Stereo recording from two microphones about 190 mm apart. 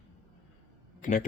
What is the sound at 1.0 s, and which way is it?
Speech, 40° left (ahead or behind).